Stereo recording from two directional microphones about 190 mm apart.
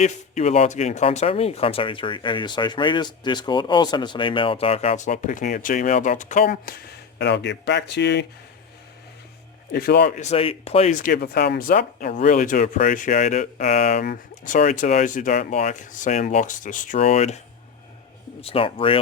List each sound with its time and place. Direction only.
0.0 s speech: 35° left (ahead or behind); by 6.7 s 50° left (ahead or behind)
7.2 s speech: 65° left (ahead or behind)
9.7 s speech: 55° left (ahead or behind)
10.2 s speech: 35° left (ahead or behind)
14.0 s speech: 50° left (ahead or behind); by 18.9 s 30° left (ahead or behind)